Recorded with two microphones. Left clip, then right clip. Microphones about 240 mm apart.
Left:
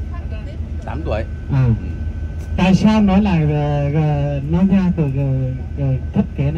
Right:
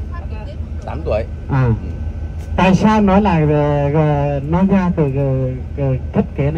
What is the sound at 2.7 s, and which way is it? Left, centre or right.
A man's voice, right.